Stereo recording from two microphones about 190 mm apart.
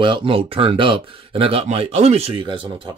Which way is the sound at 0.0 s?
25° right (ahead or behind).